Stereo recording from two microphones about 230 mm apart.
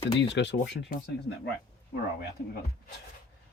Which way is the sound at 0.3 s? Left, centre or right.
Left.